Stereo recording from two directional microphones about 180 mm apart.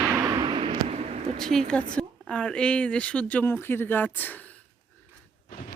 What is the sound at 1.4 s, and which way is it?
A woman's voice, centre (ahead or behind).